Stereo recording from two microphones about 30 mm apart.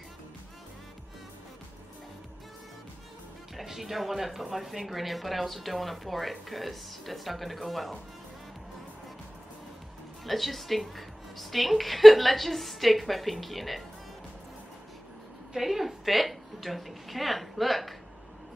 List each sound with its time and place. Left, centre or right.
3.5 s speech: centre
10.2 s speech: centre
15.5 s a woman's voice: centre